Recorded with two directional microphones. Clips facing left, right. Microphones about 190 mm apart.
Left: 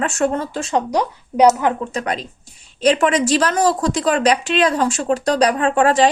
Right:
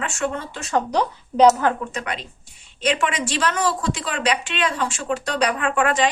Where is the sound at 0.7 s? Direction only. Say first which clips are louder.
Left 1 dB; 10° left (ahead or behind).